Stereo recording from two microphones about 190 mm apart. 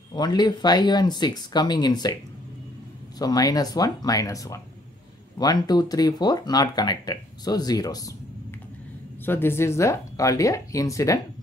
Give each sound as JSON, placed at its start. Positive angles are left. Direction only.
{"t": 0.1, "sound": "speech", "side_deg": 20}
{"t": 3.2, "sound": "speech", "side_deg": 20}
{"t": 9.2, "sound": "speech", "side_deg": 10}